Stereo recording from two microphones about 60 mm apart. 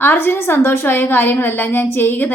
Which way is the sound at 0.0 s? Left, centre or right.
Left.